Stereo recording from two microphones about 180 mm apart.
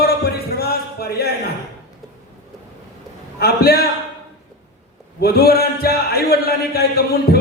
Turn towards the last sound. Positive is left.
turn(degrees=60)  # may be behind; listen again after turning